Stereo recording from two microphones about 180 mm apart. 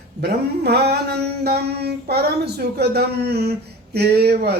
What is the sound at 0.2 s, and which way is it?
Mantra, 65° right (ahead or behind).